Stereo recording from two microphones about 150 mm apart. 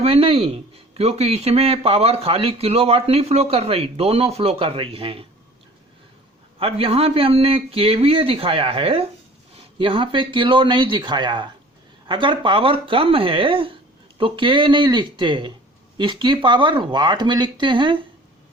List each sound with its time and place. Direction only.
0.0 s speech: 40° right (ahead or behind)
6.6 s speech: 40° right (ahead or behind)